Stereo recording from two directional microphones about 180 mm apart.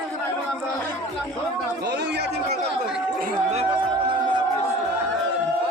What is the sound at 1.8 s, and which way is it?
Speech, 70° right (ahead or behind).